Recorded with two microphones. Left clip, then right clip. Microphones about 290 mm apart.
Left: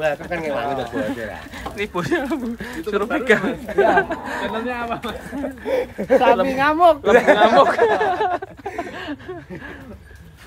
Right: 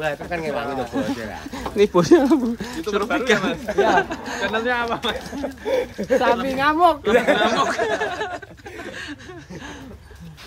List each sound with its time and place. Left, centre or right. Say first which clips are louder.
0.0 s speech: left 3 dB; centre
4.6 s speech: right 3 dB; centre
5.3 s speech: left 5 dB; centre